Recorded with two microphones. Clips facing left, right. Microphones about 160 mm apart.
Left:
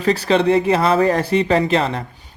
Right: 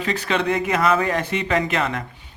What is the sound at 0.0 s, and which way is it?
Speech, 35° left (ahead or behind).